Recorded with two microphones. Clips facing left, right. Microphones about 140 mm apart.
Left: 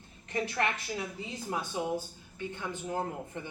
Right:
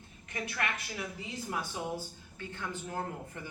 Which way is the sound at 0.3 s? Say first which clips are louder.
Left 5 dB; 25° left (ahead or behind).